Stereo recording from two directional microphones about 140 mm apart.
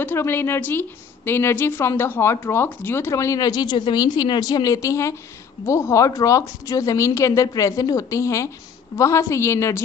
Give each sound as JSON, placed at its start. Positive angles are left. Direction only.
{"t": 0.0, "sound": "a woman's voice", "side_deg": 15}